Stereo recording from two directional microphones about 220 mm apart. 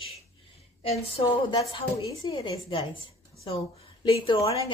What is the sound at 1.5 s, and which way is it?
A woman's voice, 25° left (ahead or behind).